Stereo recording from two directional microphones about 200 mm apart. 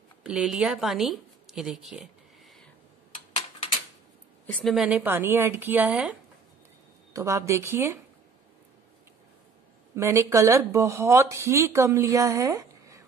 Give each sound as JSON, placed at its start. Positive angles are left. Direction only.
{"t": 0.2, "sound": "speech", "side_deg": -5}
{"t": 3.3, "sound": "a sound", "side_deg": 30}
{"t": 4.5, "sound": "speech", "side_deg": 5}
{"t": 7.2, "sound": "speech", "side_deg": -15}
{"t": 9.9, "sound": "speech", "side_deg": -15}